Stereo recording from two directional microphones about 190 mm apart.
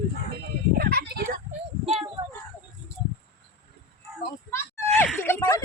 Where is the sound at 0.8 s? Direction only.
55° right (ahead or behind).